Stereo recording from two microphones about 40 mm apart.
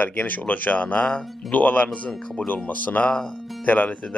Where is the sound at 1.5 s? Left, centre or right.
Left.